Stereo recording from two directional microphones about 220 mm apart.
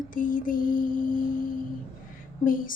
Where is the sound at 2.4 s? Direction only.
40° left (ahead or behind).